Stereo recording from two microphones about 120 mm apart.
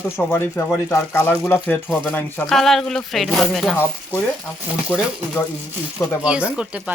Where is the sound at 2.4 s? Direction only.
5° left (ahead or behind).